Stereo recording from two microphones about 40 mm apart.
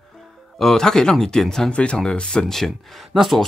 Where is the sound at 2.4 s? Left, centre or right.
Centre.